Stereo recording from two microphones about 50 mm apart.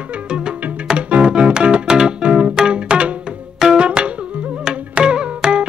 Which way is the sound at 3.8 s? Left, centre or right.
Right.